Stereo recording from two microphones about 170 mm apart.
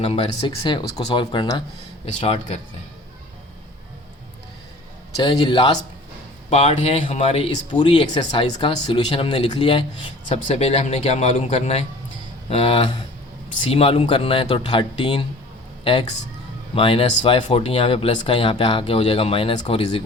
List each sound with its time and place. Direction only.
0.0 s speech: 35° left (ahead or behind)
2.2 s speech: 35° left (ahead or behind)
5.2 s speech: 30° left (ahead or behind)
10.2 s speech: 40° left (ahead or behind)